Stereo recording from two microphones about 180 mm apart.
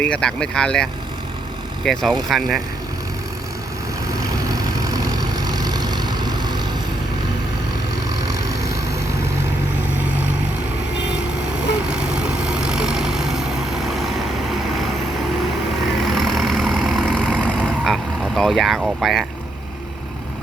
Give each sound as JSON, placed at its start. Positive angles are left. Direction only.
{"t": 0.0, "sound": "speech", "side_deg": 5}
{"t": 4.4, "sound": "vehicle", "side_deg": -20}
{"t": 8.4, "sound": "vehicle", "side_deg": -20}
{"t": 11.9, "sound": "vehicle", "side_deg": -5}
{"t": 16.0, "sound": "vehicle", "side_deg": 0}
{"t": 17.2, "sound": "vehicle", "side_deg": -10}
{"t": 17.7, "sound": "vehicle", "side_deg": 0}